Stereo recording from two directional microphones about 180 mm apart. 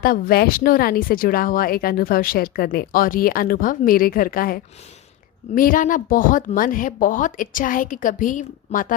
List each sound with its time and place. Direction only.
0.0 s speech: 55° left (ahead or behind)